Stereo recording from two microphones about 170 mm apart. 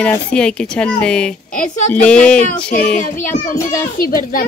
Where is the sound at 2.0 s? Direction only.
5° left (ahead or behind).